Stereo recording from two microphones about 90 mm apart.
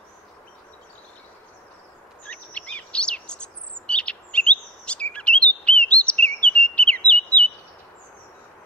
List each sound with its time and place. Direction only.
2.2 s chirp: 15° left (ahead or behind)